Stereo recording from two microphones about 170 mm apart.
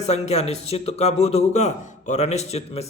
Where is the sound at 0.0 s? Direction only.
40° left (ahead or behind).